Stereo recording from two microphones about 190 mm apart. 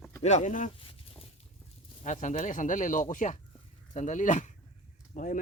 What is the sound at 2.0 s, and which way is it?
Speech, 40° left (ahead or behind).